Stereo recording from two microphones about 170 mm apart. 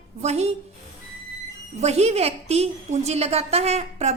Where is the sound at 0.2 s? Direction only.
40° right (ahead or behind).